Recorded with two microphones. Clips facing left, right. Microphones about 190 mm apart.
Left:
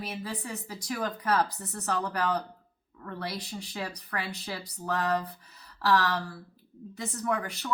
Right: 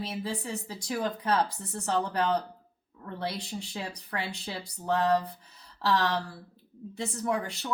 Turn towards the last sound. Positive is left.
turn(degrees=-25)  # may be behind; listen again after turning